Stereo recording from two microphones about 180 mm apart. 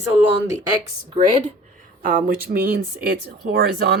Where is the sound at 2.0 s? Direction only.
55° right (ahead or behind).